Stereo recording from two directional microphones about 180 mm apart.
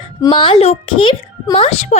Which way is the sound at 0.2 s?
25° left (ahead or behind).